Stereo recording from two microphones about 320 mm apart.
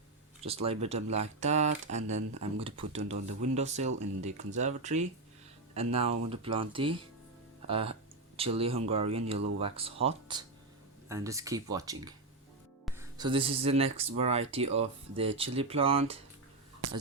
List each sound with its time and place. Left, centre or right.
0.4 s speech: centre